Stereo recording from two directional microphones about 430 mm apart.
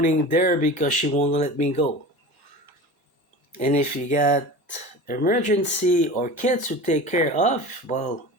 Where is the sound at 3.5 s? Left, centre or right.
Centre.